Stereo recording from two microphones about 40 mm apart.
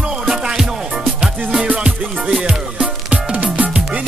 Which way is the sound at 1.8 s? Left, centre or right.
Right.